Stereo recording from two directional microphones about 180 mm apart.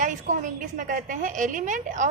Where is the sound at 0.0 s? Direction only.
45° right (ahead or behind).